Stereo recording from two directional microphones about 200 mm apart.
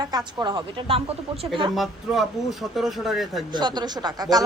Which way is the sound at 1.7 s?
Centre (ahead or behind).